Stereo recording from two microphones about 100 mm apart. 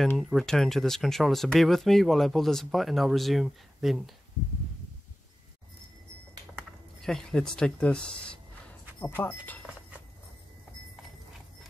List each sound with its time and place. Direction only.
0.2 s speech: centre (ahead or behind)
7.0 s speech: 5° left (ahead or behind)
9.0 s speech: 20° left (ahead or behind)